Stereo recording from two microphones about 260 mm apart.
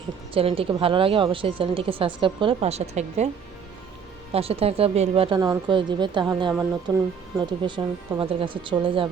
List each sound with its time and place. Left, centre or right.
0.3 s a woman's voice: right
4.3 s a woman's voice: right